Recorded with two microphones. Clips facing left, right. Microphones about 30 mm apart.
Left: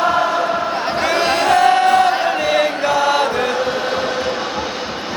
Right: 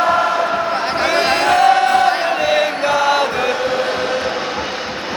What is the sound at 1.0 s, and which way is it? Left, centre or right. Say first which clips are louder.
Crowd: right 1 dB; right.